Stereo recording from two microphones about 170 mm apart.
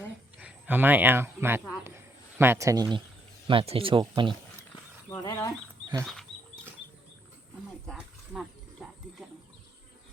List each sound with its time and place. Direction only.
0.3 s speech: 10° right (ahead or behind); by 4.4 s 30° right (ahead or behind)
5.0 s speech: 20° left (ahead or behind)
7.9 s wild animals: centre (ahead or behind)